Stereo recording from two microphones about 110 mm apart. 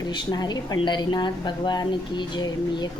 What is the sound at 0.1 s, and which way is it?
Speech, 40° left (ahead or behind).